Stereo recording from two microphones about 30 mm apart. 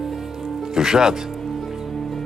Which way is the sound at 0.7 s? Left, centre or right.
Centre.